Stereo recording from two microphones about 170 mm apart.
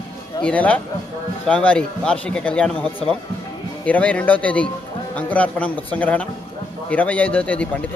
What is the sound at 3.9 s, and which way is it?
Speech, 10° left (ahead or behind).